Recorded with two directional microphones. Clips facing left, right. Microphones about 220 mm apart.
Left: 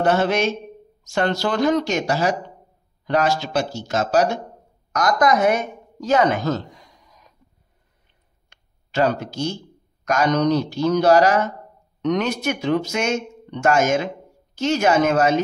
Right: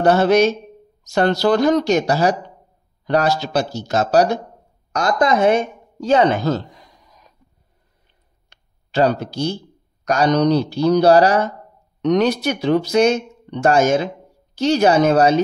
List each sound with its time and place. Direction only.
0.0 s a man's voice: 35° right (ahead or behind)
8.5 s a sound: 35° right (ahead or behind)
10.0 s a man's voice: 35° right (ahead or behind)